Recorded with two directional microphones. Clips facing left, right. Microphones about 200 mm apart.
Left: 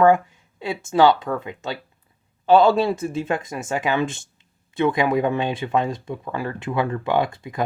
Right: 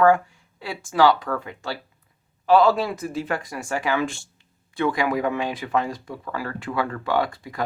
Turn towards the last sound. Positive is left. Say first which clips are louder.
# left 2 dB
turn(degrees=20)  # may be behind; listen again after turning